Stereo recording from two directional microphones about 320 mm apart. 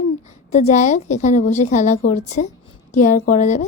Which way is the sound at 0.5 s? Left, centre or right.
Left.